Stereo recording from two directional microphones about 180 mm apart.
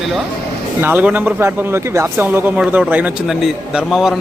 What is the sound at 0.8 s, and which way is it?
Speech, 10° right (ahead or behind).